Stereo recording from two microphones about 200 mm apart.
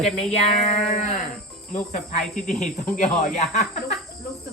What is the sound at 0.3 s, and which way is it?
Speech, 30° left (ahead or behind).